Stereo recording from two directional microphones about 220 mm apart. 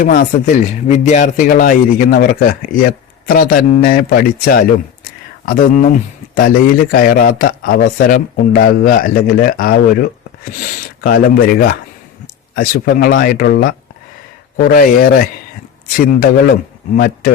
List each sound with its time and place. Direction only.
0.0 s speech: 35° left (ahead or behind)